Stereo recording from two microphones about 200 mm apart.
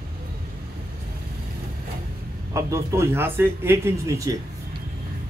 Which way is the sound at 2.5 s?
15° right (ahead or behind).